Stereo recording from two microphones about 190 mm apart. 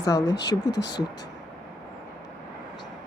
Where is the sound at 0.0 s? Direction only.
20° left (ahead or behind).